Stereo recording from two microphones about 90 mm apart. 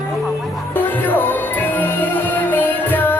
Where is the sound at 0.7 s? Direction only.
20° left (ahead or behind).